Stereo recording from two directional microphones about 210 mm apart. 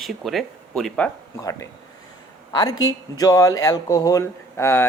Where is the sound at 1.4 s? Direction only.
15° left (ahead or behind).